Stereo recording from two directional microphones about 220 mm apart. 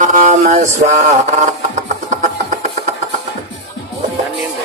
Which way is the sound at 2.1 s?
35° right (ahead or behind).